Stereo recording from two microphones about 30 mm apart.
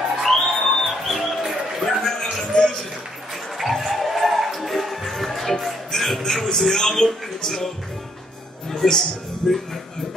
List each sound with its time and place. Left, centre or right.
0.2 s music: centre
2.5 s a sound: centre
3.5 s music: centre
6.8 s speech: centre